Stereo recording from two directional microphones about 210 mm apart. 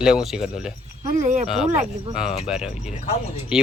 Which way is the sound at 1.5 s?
Centre (ahead or behind).